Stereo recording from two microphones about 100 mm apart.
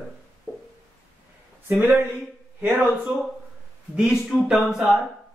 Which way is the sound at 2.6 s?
15° right (ahead or behind).